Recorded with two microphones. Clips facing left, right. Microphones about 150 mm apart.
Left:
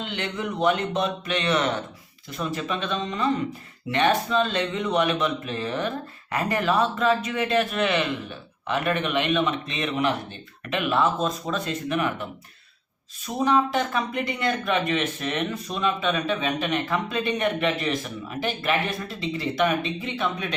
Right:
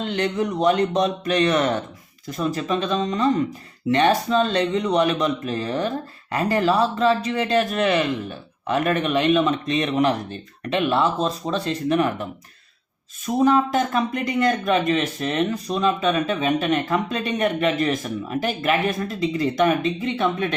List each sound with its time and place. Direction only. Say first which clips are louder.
0.0 s speech: right 7 dB; 40° right (ahead or behind)